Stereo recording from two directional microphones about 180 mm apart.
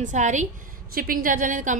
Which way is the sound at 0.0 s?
45° right (ahead or behind).